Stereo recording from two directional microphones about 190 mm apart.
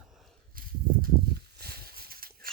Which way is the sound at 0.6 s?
50° right (ahead or behind).